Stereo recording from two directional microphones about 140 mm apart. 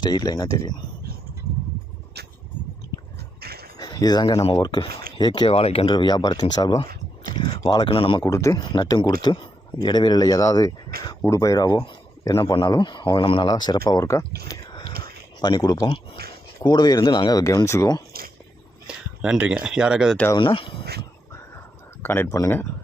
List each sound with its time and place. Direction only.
0.0 s speech: 30° left (ahead or behind)
3.4 s a sound: 90° right
3.8 s speech: 30° left (ahead or behind); by 5.9 s 45° left (ahead or behind)
5.9 s speech: 30° left (ahead or behind)
8.2 s speech: 20° left (ahead or behind)
10.9 s speech: 90° right
11.3 s a man's voice: 25° left (ahead or behind)
14.4 s a sound: 30° left (ahead or behind)
15.4 s speech: 30° left (ahead or behind)
19.2 s speech: 5° right (ahead or behind)
20.3 s speech: 40° left (ahead or behind)
22.0 s speech: 15° left (ahead or behind)